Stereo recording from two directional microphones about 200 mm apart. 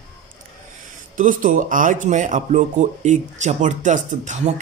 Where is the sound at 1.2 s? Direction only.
40° right (ahead or behind).